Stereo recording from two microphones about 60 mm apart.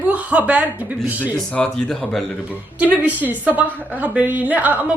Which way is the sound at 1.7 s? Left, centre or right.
Centre.